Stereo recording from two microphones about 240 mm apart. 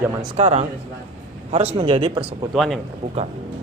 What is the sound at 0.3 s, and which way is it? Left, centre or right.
Speech, right.